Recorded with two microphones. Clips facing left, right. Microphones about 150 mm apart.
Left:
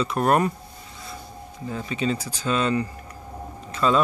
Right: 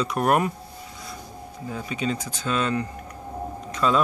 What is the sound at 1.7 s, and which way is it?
Speech, centre (ahead or behind).